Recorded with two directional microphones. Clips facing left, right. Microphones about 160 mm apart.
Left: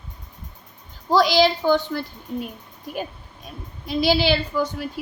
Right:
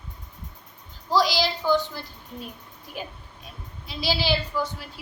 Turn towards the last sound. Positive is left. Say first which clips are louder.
# left 5 dB
turn(degrees=55)  # may be behind; listen again after turning